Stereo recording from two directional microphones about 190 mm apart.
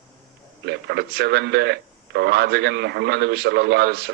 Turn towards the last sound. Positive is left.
turn(degrees=-60)  # may be behind; listen again after turning